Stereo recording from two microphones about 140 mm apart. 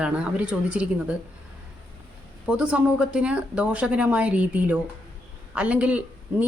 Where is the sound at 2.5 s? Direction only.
5° right (ahead or behind).